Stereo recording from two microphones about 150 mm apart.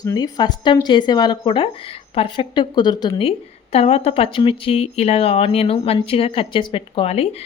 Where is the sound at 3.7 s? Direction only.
45° left (ahead or behind).